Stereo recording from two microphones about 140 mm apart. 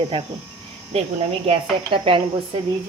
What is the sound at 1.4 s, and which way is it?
Speech, 40° right (ahead or behind).